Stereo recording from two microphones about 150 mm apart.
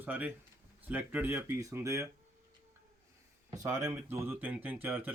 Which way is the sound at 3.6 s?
20° right (ahead or behind).